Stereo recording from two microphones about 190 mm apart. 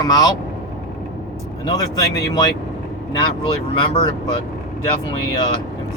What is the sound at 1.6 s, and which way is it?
Speech, 20° left (ahead or behind).